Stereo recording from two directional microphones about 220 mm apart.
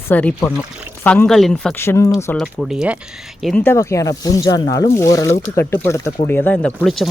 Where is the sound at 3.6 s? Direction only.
15° left (ahead or behind).